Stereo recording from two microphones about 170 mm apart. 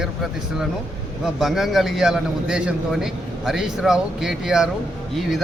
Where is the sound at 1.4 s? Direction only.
Centre (ahead or behind).